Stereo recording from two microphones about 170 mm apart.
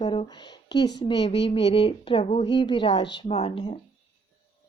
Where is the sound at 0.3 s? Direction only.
25° left (ahead or behind).